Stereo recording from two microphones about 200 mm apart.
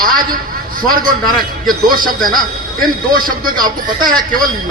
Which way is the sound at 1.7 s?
45° right (ahead or behind).